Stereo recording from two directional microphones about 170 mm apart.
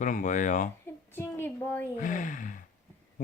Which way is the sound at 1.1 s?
15° left (ahead or behind).